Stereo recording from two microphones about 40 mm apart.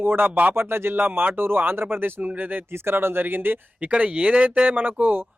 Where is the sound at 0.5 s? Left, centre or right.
Right.